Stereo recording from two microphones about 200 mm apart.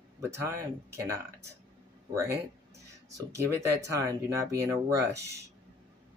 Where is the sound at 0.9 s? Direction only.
15° right (ahead or behind).